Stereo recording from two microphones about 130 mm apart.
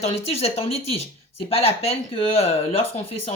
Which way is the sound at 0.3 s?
50° left (ahead or behind).